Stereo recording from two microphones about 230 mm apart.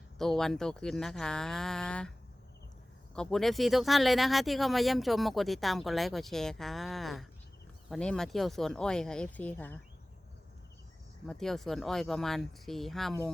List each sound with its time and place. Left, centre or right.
0.2 s speech: centre
3.2 s speech: centre
11.3 s speech: centre